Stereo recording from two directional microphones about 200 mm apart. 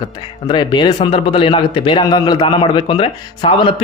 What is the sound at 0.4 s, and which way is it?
A man's voice, 20° left (ahead or behind).